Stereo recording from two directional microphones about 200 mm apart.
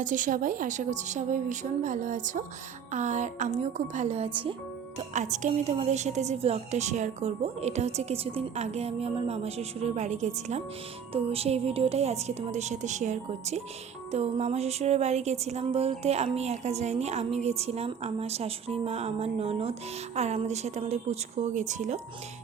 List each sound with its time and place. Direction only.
0.0 s music: 40° right (ahead or behind)